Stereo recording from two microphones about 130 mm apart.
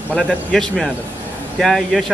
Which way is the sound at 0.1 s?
5° left (ahead or behind).